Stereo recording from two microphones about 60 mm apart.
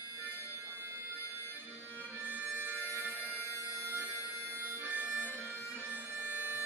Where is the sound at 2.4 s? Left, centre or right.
Right.